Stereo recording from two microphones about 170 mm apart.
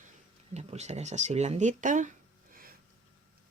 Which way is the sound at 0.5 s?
40° right (ahead or behind).